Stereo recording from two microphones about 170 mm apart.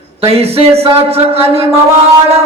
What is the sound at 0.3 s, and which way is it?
Speech, 35° right (ahead or behind).